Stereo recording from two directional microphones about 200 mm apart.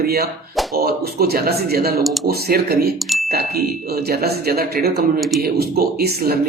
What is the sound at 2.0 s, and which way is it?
Speech, centre (ahead or behind).